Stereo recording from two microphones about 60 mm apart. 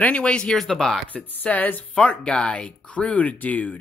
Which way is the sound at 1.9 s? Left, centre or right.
Centre.